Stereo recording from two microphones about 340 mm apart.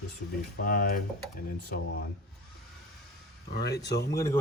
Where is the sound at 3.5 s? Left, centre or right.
Left.